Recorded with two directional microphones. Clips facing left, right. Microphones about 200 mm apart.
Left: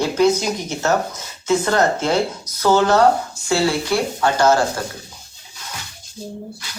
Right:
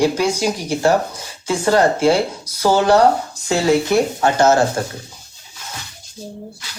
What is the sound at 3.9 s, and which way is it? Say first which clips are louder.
Speech: right 3 dB; 20° right (ahead or behind).